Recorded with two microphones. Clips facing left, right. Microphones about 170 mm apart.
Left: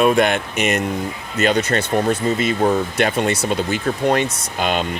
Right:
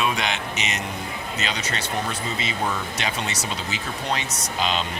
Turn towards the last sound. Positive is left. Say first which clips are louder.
# left 4 dB
turn(degrees=55)  # may be behind; listen again after turning